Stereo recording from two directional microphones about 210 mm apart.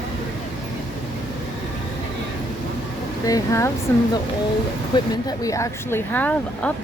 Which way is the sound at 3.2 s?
15° left (ahead or behind).